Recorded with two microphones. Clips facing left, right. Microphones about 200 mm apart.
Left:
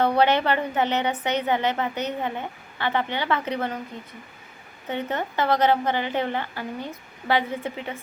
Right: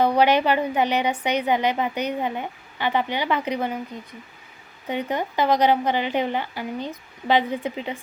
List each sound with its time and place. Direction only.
0.0 s a woman's voice: 15° right (ahead or behind)
4.9 s a woman's voice: 15° right (ahead or behind)